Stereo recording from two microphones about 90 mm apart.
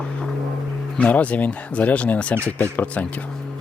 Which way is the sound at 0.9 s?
15° left (ahead or behind).